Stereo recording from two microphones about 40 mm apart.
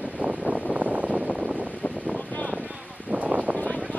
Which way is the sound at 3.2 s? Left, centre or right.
Right.